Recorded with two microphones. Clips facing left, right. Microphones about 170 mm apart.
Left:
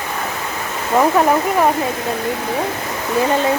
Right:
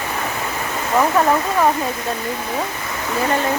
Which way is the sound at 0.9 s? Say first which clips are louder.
Left 2 dB; 15° left (ahead or behind).